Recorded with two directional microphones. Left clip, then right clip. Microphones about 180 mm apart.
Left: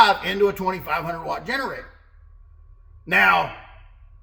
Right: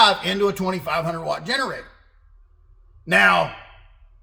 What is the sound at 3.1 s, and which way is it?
Speech, 25° right (ahead or behind).